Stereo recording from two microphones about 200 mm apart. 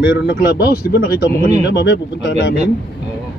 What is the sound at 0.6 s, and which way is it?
Speech, 50° left (ahead or behind).